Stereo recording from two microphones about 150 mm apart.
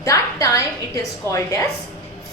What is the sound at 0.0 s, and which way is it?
A woman's voice, 20° left (ahead or behind).